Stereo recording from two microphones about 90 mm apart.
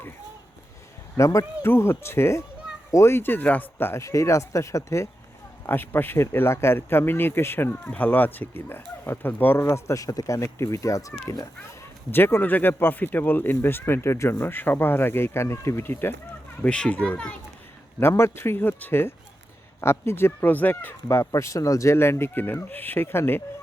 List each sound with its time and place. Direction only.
1.1 s speech: 35° left (ahead or behind)
5.6 s speech: 25° left (ahead or behind)
12.1 s speech: 25° left (ahead or behind)
16.6 s a child's voice: 10° left (ahead or behind)
18.0 s speech: 30° left (ahead or behind)
21.2 s speech: 35° left (ahead or behind)